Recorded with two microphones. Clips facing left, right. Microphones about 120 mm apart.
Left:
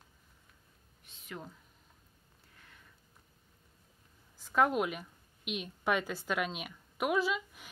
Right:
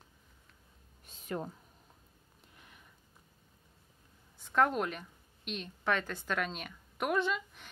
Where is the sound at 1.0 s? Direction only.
40° right (ahead or behind).